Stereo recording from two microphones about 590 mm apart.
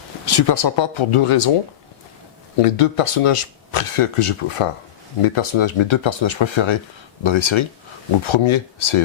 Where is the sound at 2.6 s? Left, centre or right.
Left.